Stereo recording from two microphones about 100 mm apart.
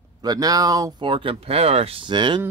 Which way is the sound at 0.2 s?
40° right (ahead or behind).